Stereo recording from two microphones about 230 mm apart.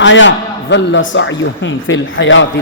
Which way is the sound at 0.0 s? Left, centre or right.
Left.